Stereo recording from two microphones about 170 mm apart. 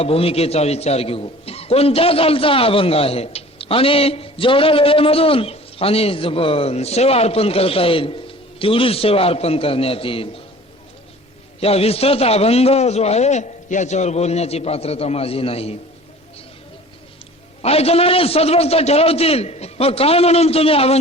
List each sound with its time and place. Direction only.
0.0 s a man's voice: 35° left (ahead or behind)
11.6 s a man's voice: 35° left (ahead or behind)
17.6 s a man's voice: 35° left (ahead or behind)